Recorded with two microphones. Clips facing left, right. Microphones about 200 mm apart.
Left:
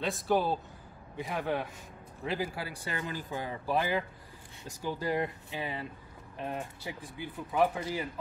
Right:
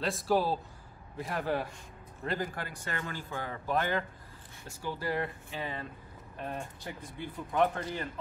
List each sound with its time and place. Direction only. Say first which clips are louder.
0.0 s a man's voice: even; centre (ahead or behind)